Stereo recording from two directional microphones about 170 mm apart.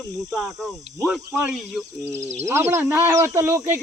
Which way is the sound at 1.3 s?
5° right (ahead or behind).